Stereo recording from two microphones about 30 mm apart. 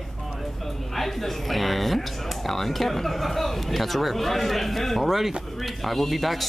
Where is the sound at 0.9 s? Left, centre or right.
Centre.